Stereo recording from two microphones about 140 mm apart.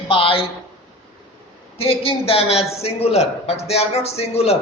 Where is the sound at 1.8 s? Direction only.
45° left (ahead or behind).